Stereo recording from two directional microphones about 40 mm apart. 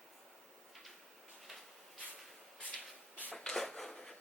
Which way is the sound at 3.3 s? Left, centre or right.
Left.